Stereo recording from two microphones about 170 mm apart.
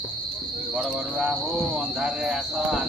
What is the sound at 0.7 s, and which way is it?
Speech, 5° right (ahead or behind).